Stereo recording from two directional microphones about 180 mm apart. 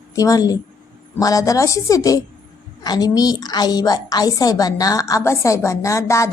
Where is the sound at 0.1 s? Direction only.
20° left (ahead or behind).